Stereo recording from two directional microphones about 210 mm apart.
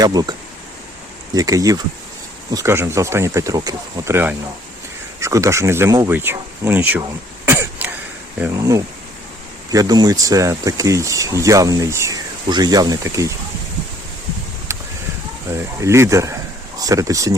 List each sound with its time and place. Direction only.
0.0 s speech: 20° right (ahead or behind)
7.4 s throat clearing: 10° right (ahead or behind)
8.4 s speech: 15° right (ahead or behind)
14.7 s a sound: 15° right (ahead or behind)
15.5 s speech: 15° right (ahead or behind)